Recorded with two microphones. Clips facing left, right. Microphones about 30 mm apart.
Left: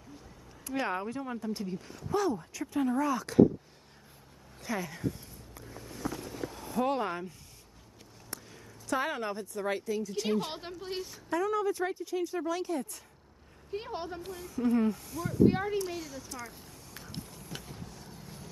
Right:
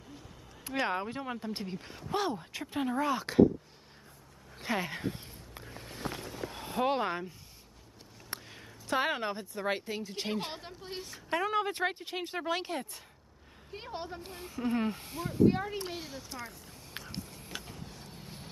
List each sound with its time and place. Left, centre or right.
0.7 s speech: right
4.6 s a sound: right
6.5 s speech: right
11.2 s speech: right
13.7 s a woman's voice: centre
14.3 s speech: right
15.4 s a woman's voice: centre
15.9 s speech: right
17.5 s vehicle: right
17.8 s a sound: right